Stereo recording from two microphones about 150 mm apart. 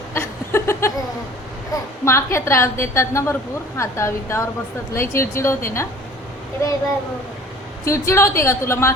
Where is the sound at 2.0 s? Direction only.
15° left (ahead or behind).